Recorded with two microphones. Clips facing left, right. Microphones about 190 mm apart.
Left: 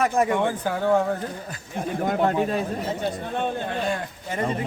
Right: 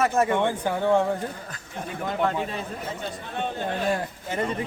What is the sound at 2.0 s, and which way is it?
Speech, 45° left (ahead or behind).